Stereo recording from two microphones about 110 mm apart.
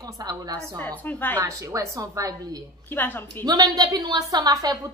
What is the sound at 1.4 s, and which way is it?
Speech, 30° right (ahead or behind).